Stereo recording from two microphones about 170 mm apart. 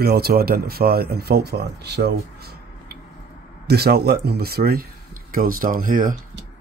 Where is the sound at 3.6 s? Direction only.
70° right (ahead or behind).